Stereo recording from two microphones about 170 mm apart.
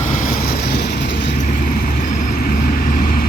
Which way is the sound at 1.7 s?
60° left (ahead or behind).